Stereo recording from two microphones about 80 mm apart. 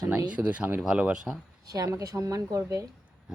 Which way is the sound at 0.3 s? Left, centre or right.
Centre.